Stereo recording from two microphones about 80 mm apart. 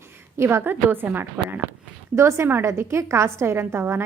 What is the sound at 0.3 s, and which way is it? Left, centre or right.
A woman's voice, right.